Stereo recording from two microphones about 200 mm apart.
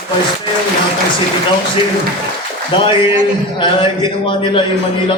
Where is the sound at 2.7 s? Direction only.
25° left (ahead or behind).